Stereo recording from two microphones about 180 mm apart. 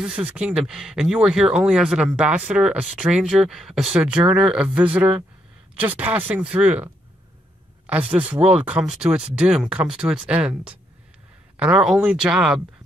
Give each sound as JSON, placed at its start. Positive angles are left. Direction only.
{"t": 0.0, "sound": "speech", "side_deg": -5}